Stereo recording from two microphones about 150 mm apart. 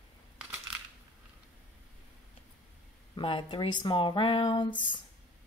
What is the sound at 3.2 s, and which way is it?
Speech, 35° left (ahead or behind).